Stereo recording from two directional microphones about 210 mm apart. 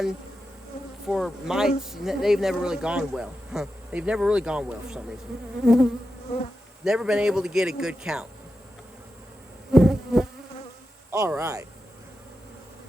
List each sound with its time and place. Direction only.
1.0 s speech: centre (ahead or behind)
9.7 s insect: 5° right (ahead or behind)
11.1 s speech: 15° right (ahead or behind)